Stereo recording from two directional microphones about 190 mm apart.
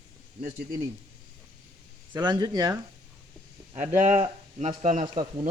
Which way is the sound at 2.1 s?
25° right (ahead or behind).